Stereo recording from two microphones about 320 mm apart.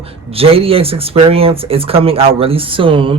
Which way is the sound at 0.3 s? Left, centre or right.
Centre.